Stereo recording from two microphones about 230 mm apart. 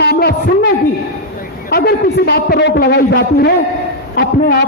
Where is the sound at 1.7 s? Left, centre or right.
Left.